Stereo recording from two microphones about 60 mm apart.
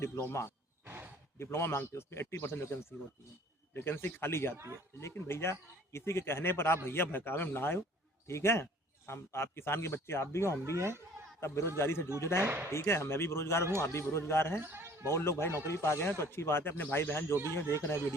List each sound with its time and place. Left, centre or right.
0.0 s speech: left
0.9 s a sound: right
1.4 s speech: left
3.8 s speech: left
4.5 s speech: right
5.1 s speech: left
8.3 s speech: left
10.8 s speech: right
11.3 s a man's voice: left
14.6 s speech: right
15.1 s speech: left